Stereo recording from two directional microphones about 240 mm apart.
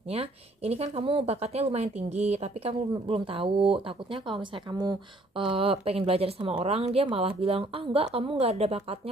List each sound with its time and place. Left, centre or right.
0.1 s speech: right